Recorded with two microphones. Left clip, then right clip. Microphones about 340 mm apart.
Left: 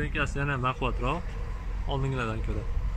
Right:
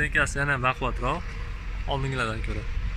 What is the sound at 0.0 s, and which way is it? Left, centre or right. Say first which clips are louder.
Speech: right 7 dB; centre.